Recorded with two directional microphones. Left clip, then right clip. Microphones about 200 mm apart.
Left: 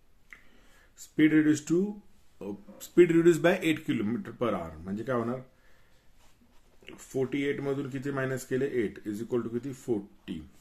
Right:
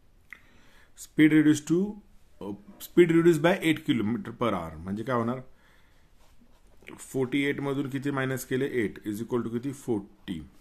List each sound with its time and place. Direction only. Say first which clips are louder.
0.9 s speech: right 3 dB; 45° right (ahead or behind)
6.8 s speech: right 1 dB; 40° right (ahead or behind)